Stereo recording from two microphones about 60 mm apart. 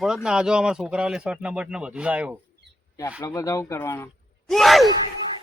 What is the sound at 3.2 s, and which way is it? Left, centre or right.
Speech, left.